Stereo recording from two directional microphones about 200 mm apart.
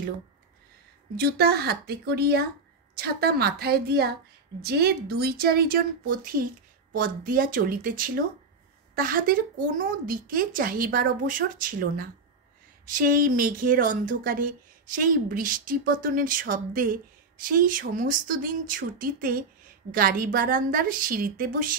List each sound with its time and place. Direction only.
1.1 s speech: 50° right (ahead or behind)